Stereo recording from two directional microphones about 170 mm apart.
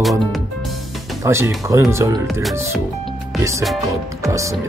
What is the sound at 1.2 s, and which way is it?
Speech, 15° right (ahead or behind).